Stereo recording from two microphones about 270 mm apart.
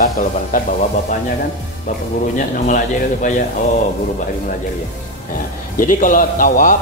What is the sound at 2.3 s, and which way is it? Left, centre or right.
A man's voice, left.